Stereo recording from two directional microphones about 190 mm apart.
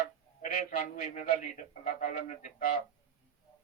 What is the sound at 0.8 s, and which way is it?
Speech, 40° left (ahead or behind).